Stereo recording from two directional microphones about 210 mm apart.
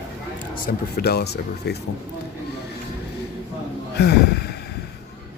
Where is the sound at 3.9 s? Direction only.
50° left (ahead or behind).